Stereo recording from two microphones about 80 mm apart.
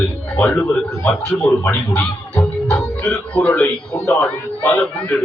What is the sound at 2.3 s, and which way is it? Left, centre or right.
Music, centre.